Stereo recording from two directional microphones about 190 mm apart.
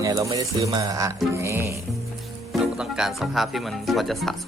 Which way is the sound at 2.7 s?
Centre (ahead or behind).